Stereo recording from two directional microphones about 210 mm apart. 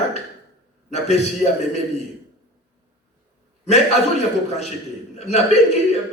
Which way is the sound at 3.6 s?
30° left (ahead or behind).